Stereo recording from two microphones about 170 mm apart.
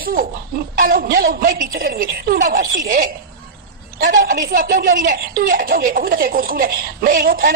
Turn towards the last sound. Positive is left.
turn(degrees=-60)  # may be behind; listen again after turning